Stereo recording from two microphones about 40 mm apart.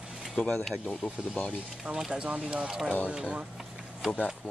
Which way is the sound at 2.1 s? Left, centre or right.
Right.